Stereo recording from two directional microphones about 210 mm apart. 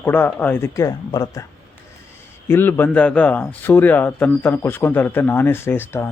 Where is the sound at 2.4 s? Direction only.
10° left (ahead or behind).